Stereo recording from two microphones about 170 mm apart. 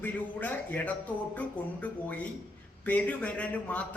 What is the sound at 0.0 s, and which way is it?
Speech, 10° left (ahead or behind).